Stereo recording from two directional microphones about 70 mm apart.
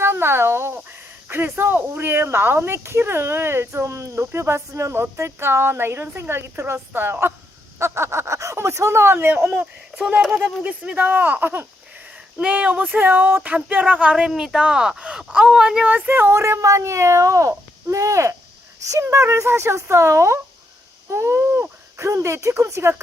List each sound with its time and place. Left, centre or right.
0.0 s speech: right
10.3 s speech: centre
12.1 s speech: centre; by 16.4 s right
16.4 s speech: right